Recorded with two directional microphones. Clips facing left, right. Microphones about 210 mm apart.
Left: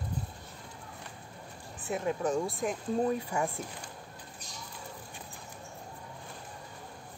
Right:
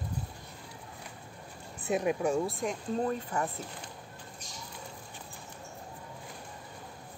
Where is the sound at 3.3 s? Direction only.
10° left (ahead or behind).